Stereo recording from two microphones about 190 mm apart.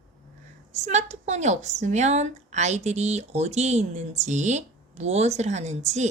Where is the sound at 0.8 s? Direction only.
35° right (ahead or behind).